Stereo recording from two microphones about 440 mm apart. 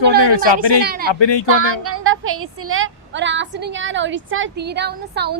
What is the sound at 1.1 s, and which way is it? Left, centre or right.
Speech, left.